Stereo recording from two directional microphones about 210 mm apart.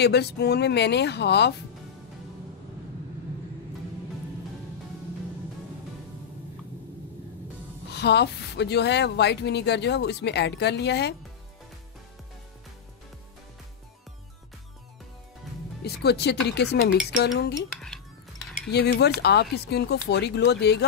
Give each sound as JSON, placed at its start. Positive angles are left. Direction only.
{"t": 0.0, "sound": "speech", "side_deg": 50}
{"t": 7.9, "sound": "speech", "side_deg": 50}
{"t": 15.8, "sound": "speech", "side_deg": 50}
{"t": 17.7, "sound": "dishes", "side_deg": 0}
{"t": 18.7, "sound": "speech", "side_deg": 50}